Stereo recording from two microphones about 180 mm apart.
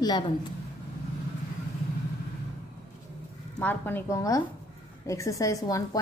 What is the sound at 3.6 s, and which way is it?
A woman's voice, 10° left (ahead or behind).